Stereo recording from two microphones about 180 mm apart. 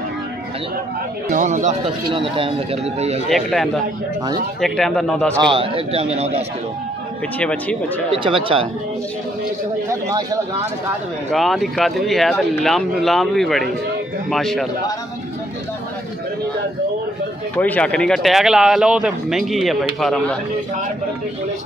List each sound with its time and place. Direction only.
1.3 s speech: 45° right (ahead or behind)
2.0 s a man's voice: 30° right (ahead or behind)
3.3 s speech: centre (ahead or behind)
5.4 s a man's voice: 30° right (ahead or behind)
7.3 s speech: 10° left (ahead or behind)
8.1 s a man's voice: 30° right (ahead or behind)
9.8 s a sound: 20° right (ahead or behind)
11.3 s speech: centre (ahead or behind)
17.6 s speech: 10° left (ahead or behind)